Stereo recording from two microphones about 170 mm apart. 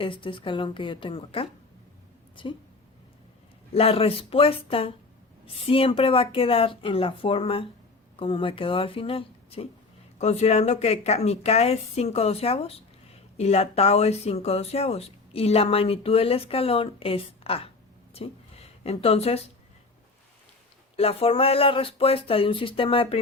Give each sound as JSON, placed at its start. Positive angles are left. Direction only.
{"t": 0.0, "sound": "speech", "side_deg": 30}
{"t": 3.8, "sound": "speech", "side_deg": 35}
{"t": 18.1, "sound": "a sound", "side_deg": 35}
{"t": 20.9, "sound": "speech", "side_deg": 35}